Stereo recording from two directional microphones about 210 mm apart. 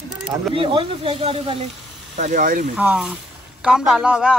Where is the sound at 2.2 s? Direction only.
40° right (ahead or behind).